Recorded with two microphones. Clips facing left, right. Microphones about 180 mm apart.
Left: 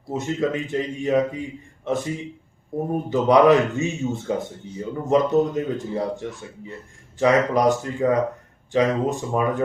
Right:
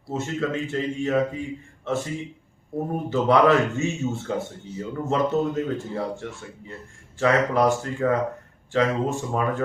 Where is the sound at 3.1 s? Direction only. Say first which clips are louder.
Left 3 dB; 15° left (ahead or behind).